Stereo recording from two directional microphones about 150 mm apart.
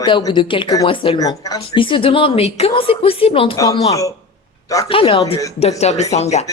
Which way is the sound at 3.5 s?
25° left (ahead or behind).